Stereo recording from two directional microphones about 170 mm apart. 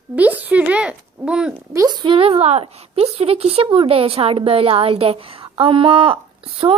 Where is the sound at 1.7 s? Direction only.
25° right (ahead or behind).